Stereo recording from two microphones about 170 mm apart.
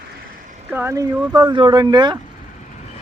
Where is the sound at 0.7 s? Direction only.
15° right (ahead or behind).